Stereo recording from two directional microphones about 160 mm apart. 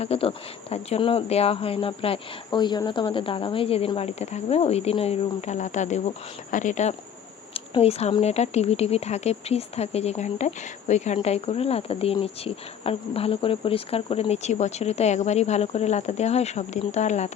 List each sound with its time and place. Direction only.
0.0 s speech: 35° left (ahead or behind)
7.5 s speech: 40° left (ahead or behind)